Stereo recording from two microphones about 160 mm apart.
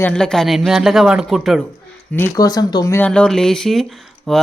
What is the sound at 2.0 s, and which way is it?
Speech, 15° left (ahead or behind).